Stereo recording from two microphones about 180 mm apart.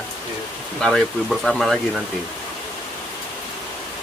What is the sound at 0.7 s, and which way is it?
Speech, 5° left (ahead or behind).